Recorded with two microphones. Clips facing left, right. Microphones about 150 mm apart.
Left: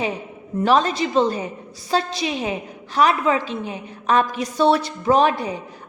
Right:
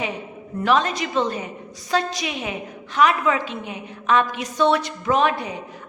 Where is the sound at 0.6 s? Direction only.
35° left (ahead or behind).